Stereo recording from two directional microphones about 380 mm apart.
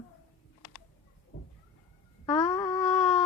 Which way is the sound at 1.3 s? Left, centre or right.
Left.